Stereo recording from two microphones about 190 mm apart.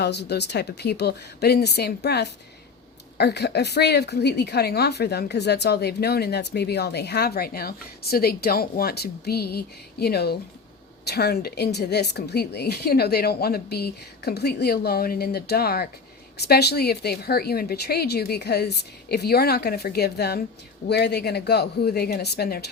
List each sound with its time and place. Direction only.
0.0 s a woman's voice: 60° left (ahead or behind)